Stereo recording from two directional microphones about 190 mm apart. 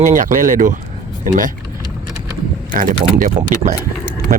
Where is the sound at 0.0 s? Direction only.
40° right (ahead or behind).